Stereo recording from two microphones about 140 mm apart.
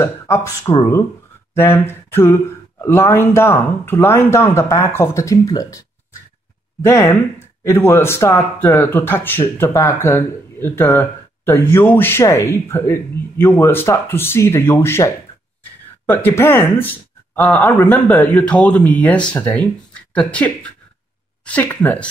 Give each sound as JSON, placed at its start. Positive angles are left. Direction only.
{"t": 0.0, "sound": "speech", "side_deg": 20}
{"t": 1.5, "sound": "a sound", "side_deg": 15}
{"t": 2.8, "sound": "speech", "side_deg": 20}